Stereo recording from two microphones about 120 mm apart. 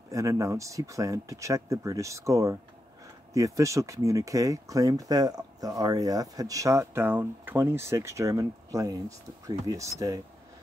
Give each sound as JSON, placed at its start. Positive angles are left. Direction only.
{"t": 0.1, "sound": "speech", "side_deg": -25}